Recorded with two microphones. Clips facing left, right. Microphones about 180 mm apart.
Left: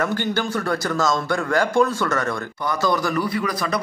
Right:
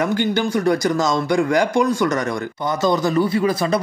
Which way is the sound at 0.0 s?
15° right (ahead or behind).